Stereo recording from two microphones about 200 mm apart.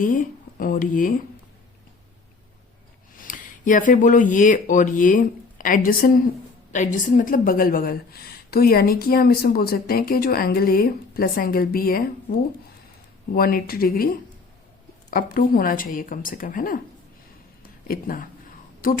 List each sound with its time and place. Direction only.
0.0 s speech: 45° left (ahead or behind)
3.2 s a woman's voice: 40° left (ahead or behind)
13.3 s a woman's voice: 50° left (ahead or behind)
15.1 s a woman's voice: 45° left (ahead or behind)
17.6 s a sound: 45° left (ahead or behind)
18.8 s a woman's voice: 45° left (ahead or behind)